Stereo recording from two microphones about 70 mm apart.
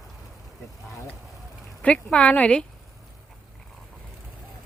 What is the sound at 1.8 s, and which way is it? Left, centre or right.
Speech, centre.